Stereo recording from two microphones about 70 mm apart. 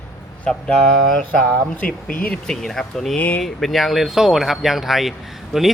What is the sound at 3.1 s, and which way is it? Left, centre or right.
Speech, centre.